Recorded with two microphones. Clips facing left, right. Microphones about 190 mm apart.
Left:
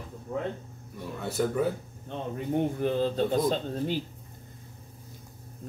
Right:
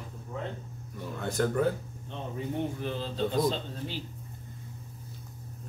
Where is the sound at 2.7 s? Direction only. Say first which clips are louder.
Left 8 dB; 55° left (ahead or behind).